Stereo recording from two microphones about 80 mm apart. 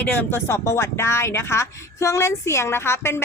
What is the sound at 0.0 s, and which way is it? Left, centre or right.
Speech, left.